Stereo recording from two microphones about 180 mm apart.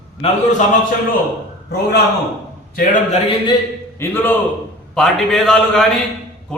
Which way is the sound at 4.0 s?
10° left (ahead or behind).